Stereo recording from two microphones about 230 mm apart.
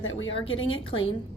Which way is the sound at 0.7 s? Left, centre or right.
Left.